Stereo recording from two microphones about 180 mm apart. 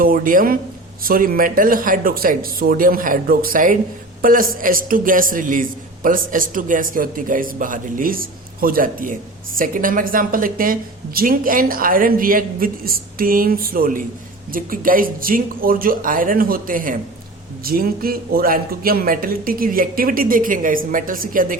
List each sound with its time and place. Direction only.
0.0 s a man's voice: 50° right (ahead or behind)